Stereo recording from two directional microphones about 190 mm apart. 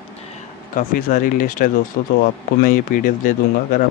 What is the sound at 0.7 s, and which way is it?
Speech, 45° left (ahead or behind).